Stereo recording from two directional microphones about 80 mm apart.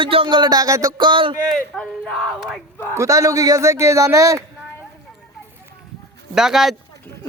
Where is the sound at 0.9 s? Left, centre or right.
Right.